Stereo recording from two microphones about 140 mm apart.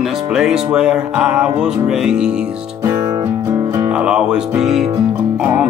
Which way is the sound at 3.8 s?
5° right (ahead or behind).